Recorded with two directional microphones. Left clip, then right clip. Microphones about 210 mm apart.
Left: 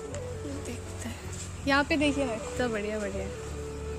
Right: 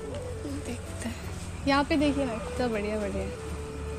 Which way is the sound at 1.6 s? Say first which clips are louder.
Even; 15° left (ahead or behind).